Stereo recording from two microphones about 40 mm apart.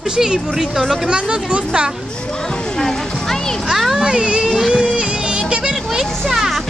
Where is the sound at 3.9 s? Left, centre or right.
Centre.